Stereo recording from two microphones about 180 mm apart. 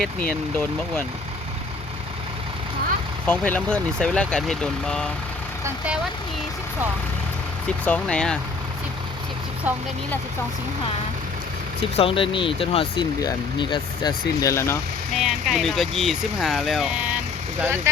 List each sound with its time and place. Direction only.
0.0 s speech: 5° left (ahead or behind)
3.2 s speech: 10° left (ahead or behind)
5.6 s speech: 5° right (ahead or behind)
7.9 s speech: 5° left (ahead or behind)
9.7 s speech: 10° right (ahead or behind)
11.8 s speech: 30° left (ahead or behind); by 14.8 s 15° left (ahead or behind)
15.1 s speech: centre (ahead or behind)